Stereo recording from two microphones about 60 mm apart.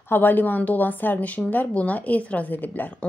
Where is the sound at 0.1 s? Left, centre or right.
Left.